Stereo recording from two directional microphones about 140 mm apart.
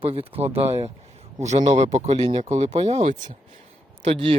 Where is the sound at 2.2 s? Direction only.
40° right (ahead or behind).